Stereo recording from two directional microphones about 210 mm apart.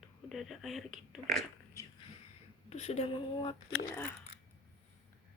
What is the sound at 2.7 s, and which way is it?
Speech, 30° left (ahead or behind).